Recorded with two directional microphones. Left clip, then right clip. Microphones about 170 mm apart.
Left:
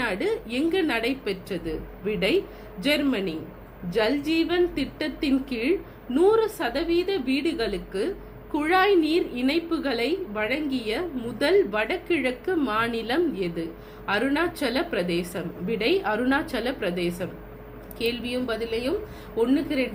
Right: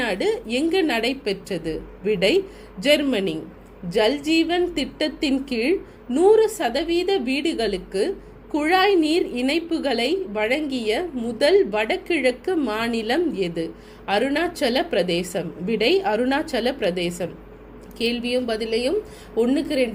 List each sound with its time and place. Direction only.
0.0 s a woman's voice: 50° right (ahead or behind)